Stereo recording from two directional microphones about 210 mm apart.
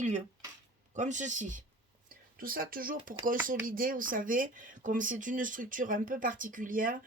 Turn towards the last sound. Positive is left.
turn(degrees=-40)  # may be behind; listen again after turning